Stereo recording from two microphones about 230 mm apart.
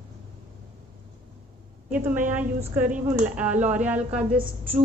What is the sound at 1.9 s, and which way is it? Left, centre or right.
A woman's voice, centre.